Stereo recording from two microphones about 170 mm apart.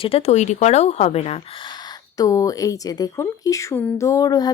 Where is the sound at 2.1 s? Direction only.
20° left (ahead or behind).